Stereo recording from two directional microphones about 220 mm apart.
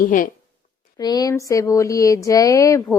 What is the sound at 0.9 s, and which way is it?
Speech, 15° left (ahead or behind).